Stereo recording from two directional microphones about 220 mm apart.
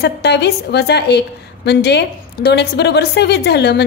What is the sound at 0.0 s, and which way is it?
A woman's voice, 50° left (ahead or behind).